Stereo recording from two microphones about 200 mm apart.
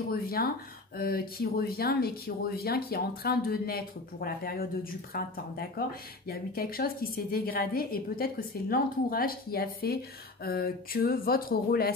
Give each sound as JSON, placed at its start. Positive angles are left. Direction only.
{"t": 0.1, "sound": "speech", "side_deg": 50}